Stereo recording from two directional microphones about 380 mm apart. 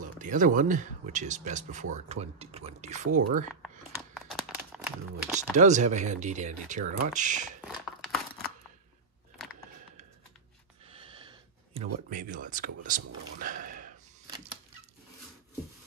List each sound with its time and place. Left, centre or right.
0.0 s speech: centre
3.9 s crumpling: centre
5.6 s speech: centre
7.6 s a sound: centre
10.9 s gasp: centre
14.3 s a sound: centre